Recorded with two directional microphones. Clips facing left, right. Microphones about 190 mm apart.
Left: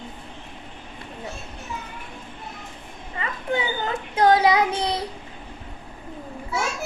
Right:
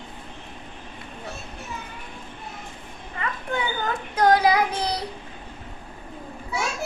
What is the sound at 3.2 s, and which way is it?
Child singing, 25° left (ahead or behind).